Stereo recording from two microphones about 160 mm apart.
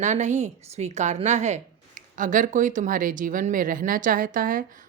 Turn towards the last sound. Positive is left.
turn(degrees=-60)  # may be behind; listen again after turning